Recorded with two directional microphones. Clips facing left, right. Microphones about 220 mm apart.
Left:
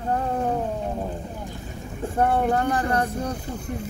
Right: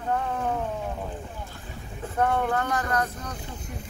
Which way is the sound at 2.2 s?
30° left (ahead or behind).